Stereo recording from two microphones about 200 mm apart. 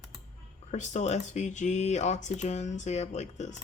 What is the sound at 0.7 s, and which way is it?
Speech, 35° left (ahead or behind).